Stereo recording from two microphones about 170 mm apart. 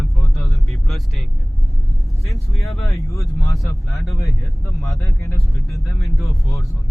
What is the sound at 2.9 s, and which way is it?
Speech, 20° left (ahead or behind).